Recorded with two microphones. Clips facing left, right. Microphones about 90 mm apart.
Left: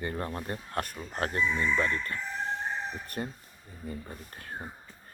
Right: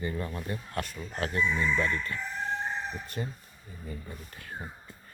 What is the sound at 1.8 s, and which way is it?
Speech, 45° left (ahead or behind).